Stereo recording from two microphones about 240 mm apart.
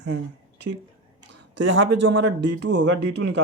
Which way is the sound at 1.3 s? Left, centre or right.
Right.